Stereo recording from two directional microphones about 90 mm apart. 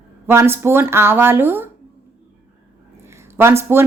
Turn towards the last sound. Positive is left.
turn(degrees=-25)  # may be behind; listen again after turning